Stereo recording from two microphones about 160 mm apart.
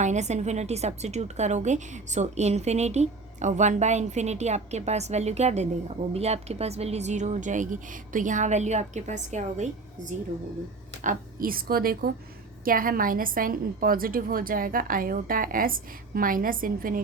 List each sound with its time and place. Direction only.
0.0 s a woman's voice: 45° right (ahead or behind)
11.0 s a woman's voice: 60° right (ahead or behind)